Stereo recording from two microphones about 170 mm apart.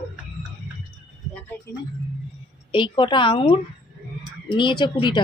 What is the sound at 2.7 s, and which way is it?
A woman's voice, 30° left (ahead or behind).